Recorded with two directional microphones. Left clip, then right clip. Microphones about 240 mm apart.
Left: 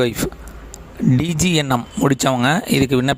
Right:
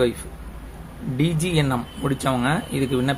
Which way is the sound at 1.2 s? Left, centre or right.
Left.